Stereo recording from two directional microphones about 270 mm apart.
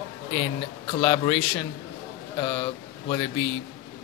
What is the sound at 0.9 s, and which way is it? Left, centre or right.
Speech, left.